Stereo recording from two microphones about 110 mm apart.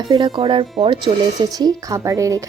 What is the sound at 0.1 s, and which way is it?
Speech, 45° right (ahead or behind).